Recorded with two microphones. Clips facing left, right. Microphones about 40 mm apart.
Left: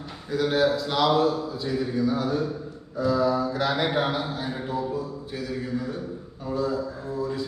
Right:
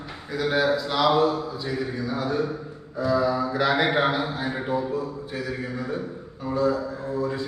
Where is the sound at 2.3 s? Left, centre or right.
Centre.